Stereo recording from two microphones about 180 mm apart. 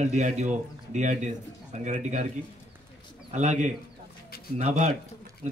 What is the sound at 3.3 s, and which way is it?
A man's voice, 40° right (ahead or behind).